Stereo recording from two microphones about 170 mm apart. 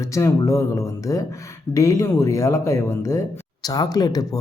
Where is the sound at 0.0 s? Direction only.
20° left (ahead or behind).